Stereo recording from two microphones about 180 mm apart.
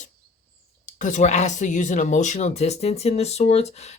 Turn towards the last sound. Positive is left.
turn(degrees=35)  # may be behind; listen again after turning